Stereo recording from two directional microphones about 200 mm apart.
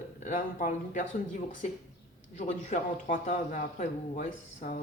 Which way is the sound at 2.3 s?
40° left (ahead or behind).